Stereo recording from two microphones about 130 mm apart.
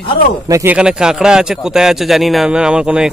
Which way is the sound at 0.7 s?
5° right (ahead or behind).